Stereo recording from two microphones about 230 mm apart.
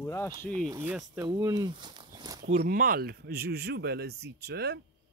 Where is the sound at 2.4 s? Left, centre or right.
Right.